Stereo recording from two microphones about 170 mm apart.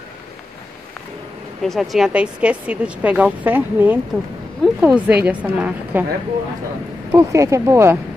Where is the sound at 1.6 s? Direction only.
Centre (ahead or behind).